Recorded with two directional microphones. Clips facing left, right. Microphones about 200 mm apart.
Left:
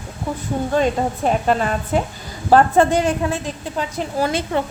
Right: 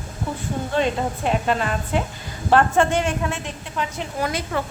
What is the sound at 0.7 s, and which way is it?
A woman's voice, 45° left (ahead or behind).